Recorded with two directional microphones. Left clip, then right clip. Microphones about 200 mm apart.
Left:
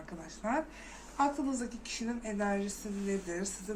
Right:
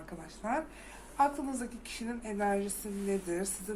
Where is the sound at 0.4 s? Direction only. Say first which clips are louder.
Even; 15° right (ahead or behind).